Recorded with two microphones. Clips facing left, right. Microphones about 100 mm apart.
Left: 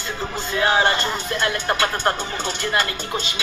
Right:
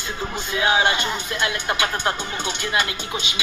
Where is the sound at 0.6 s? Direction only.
10° right (ahead or behind).